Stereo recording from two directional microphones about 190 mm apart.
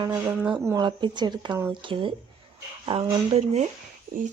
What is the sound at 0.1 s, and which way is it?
Speech, 10° right (ahead or behind).